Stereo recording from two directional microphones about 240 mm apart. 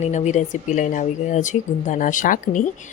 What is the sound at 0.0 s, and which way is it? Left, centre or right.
A woman's voice, left.